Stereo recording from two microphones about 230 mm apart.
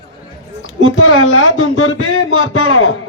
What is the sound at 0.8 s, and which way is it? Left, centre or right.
A man's voice, left.